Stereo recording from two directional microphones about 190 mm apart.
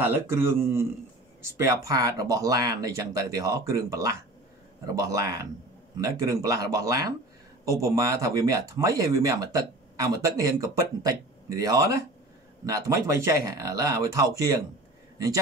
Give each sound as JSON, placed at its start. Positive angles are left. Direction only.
{"t": 0.0, "sound": "speech", "side_deg": -10}